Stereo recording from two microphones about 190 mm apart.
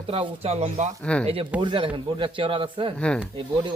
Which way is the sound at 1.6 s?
25° right (ahead or behind).